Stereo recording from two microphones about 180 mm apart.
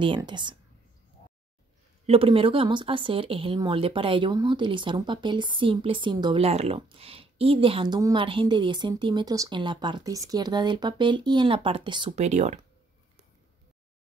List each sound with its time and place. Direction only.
0.0 s speech: 25° right (ahead or behind)
2.0 s speech: 30° right (ahead or behind)
12.3 s speech: 40° right (ahead or behind)